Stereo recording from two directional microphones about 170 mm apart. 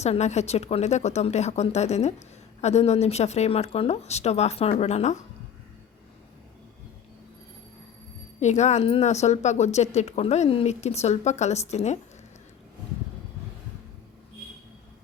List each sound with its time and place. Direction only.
0.0 s speech: 40° left (ahead or behind)
8.4 s speech: 45° left (ahead or behind)